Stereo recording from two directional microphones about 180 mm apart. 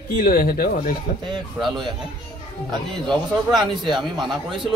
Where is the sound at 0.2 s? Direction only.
50° left (ahead or behind).